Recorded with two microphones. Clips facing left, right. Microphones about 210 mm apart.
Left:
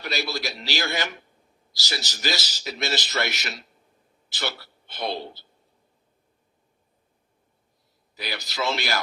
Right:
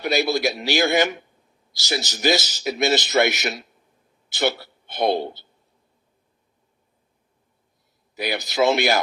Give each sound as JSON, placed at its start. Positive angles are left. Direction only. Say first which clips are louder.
{"t": 0.0, "sound": "a man's voice", "louder": "right 9 dB", "side_deg": -50}
{"t": 8.1, "sound": "a man's voice", "louder": "right 8 dB", "side_deg": -50}